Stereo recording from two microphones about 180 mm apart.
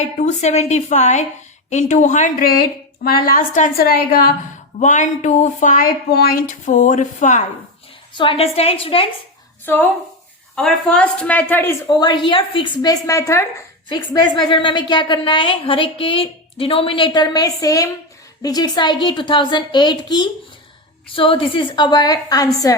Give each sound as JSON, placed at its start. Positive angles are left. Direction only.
{"t": 0.0, "sound": "a woman's voice", "side_deg": 40}
{"t": 4.8, "sound": "speech", "side_deg": 40}
{"t": 8.1, "sound": "a woman's voice", "side_deg": 30}
{"t": 10.5, "sound": "a woman's voice", "side_deg": 5}
{"t": 11.9, "sound": "a woman's voice", "side_deg": 25}